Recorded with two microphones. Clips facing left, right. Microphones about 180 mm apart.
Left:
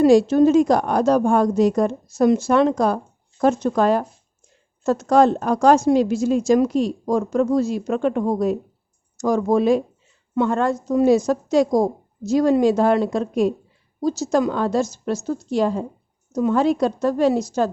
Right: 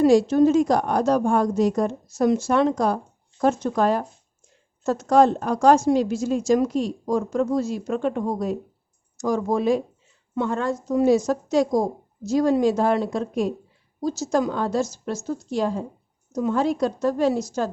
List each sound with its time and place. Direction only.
0.0 s a woman's voice: 70° left (ahead or behind); by 8.5 s 85° left
9.1 s a woman's voice: 70° left (ahead or behind)
10.3 s a woman's voice: 65° left (ahead or behind); by 13.5 s 85° left
14.0 s a woman's voice: 70° left (ahead or behind)
16.3 s a woman's voice: 85° left